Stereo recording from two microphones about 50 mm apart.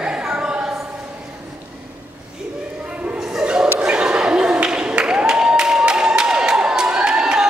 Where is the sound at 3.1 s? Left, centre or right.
Centre.